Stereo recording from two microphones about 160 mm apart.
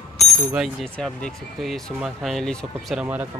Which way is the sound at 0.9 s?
5° left (ahead or behind).